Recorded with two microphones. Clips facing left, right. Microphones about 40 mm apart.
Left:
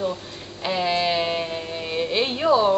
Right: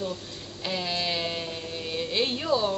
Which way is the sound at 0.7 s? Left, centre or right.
Centre.